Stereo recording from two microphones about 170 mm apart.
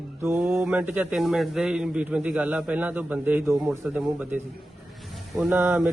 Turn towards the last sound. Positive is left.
turn(degrees=-10)  # may be behind; listen again after turning